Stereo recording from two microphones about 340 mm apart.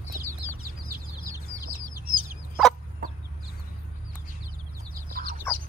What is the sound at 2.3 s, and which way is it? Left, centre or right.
Chicken, centre.